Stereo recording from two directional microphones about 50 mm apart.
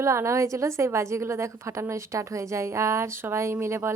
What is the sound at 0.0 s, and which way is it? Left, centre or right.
A woman's voice, right.